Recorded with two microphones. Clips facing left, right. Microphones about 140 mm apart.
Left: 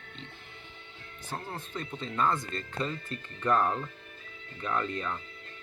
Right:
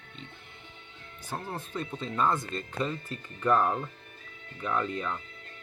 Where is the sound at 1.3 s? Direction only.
20° right (ahead or behind).